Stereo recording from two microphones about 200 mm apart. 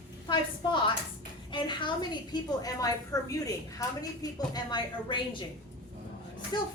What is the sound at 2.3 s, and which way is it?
A woman's voice, 20° left (ahead or behind).